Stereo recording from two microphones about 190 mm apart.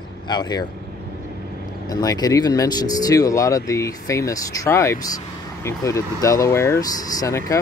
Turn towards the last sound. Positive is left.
turn(degrees=15)  # may be behind; listen again after turning